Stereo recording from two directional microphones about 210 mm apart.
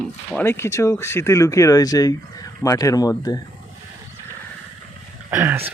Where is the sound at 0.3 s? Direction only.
10° left (ahead or behind).